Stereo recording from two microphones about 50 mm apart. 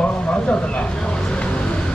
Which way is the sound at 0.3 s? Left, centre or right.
Left.